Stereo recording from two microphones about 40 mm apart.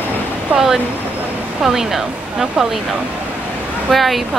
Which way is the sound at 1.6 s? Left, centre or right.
Centre.